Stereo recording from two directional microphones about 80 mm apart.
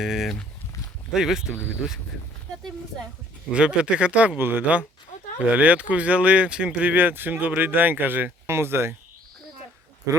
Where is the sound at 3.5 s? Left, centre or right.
Centre; by 8.9 s right.